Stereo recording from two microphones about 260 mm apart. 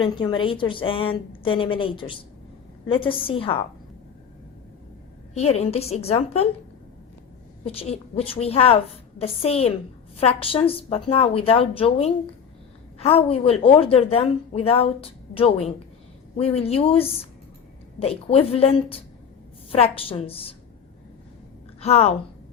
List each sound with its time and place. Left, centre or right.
0.0 s a woman's voice: centre
5.3 s a woman's voice: left
7.6 s a woman's voice: left
21.8 s a woman's voice: left